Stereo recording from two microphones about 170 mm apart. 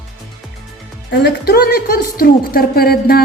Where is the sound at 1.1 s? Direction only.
75° left (ahead or behind).